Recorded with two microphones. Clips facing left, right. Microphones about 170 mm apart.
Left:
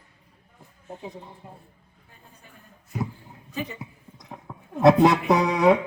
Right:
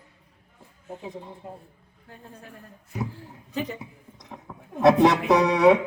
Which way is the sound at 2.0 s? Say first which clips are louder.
Right 9 dB; 75° right (ahead or behind).